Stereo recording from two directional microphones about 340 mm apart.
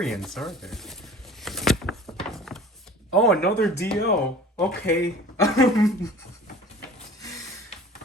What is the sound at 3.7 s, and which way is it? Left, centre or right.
Speech, left.